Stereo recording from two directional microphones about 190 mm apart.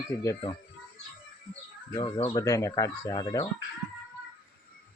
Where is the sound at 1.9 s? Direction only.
20° left (ahead or behind).